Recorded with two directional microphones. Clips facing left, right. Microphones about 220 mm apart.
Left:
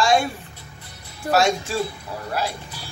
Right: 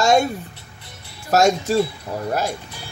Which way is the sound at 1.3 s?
40° right (ahead or behind).